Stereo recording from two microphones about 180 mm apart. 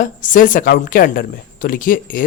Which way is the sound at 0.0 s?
45° left (ahead or behind).